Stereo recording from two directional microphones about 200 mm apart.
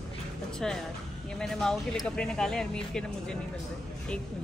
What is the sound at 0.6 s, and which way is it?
Speech, 5° left (ahead or behind).